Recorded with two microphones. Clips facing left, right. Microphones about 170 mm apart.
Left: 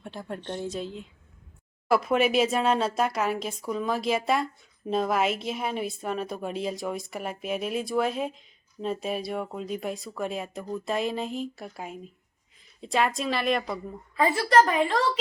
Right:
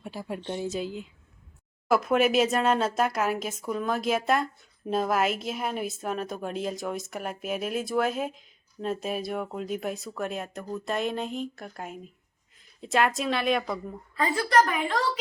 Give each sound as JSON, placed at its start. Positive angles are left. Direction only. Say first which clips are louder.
{"t": 0.0, "sound": "a woman's voice", "louder": "right 1 dB", "side_deg": -5}
{"t": 14.2, "sound": "a woman's voice", "louder": "left 2 dB", "side_deg": 30}